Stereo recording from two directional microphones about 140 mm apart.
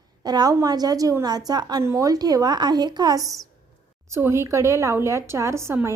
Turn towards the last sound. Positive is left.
turn(degrees=-20)  # may be behind; listen again after turning